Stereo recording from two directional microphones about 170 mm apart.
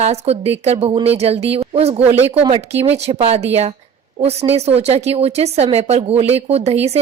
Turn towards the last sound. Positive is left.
turn(degrees=-35)  # may be behind; listen again after turning